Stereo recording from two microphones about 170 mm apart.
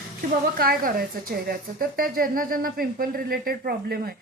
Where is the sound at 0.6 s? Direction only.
60° right (ahead or behind).